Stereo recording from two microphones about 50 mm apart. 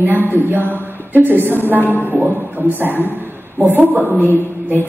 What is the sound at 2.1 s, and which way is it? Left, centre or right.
A woman's voice, right.